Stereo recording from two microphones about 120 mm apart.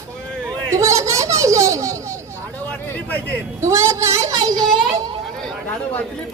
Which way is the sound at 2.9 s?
15° left (ahead or behind).